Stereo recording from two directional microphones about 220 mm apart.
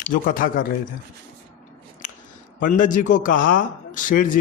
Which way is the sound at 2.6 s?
35° left (ahead or behind).